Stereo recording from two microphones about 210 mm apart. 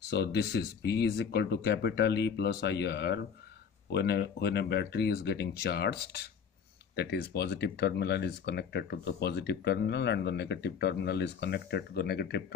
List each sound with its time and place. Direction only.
0.1 s speech: 50° left (ahead or behind)
7.0 s speech: 50° left (ahead or behind)